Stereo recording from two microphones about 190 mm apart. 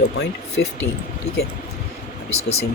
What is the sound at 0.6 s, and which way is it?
Speech, 65° left (ahead or behind).